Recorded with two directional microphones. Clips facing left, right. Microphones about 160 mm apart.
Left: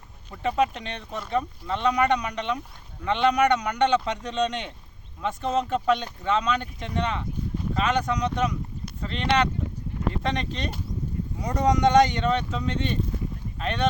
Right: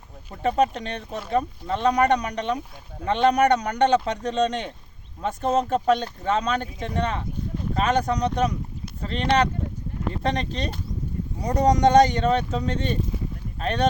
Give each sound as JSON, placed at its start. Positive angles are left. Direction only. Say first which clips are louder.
{"t": 0.3, "sound": "speech", "louder": "right 3 dB", "side_deg": -40}